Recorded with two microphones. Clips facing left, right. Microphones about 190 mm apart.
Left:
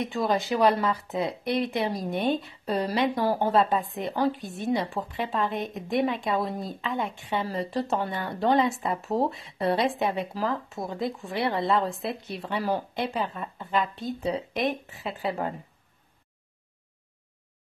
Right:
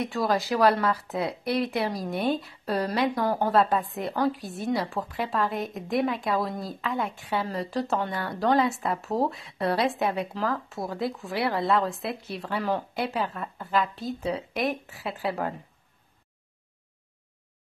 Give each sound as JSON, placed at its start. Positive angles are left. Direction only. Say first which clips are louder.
{"t": 0.1, "sound": "a woman's voice", "louder": "left 1 dB", "side_deg": 0}